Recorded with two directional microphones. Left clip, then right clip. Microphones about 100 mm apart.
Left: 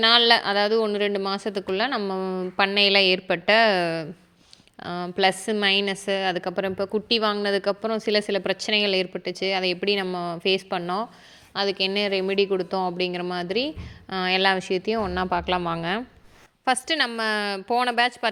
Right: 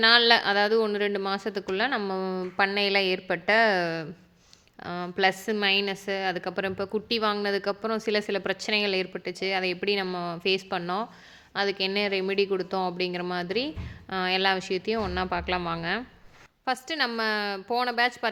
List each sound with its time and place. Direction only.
0.0 s a woman's voice: 30° left (ahead or behind)
2.7 s a woman's voice: 40° left (ahead or behind)